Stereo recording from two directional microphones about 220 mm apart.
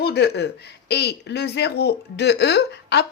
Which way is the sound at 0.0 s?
50° left (ahead or behind).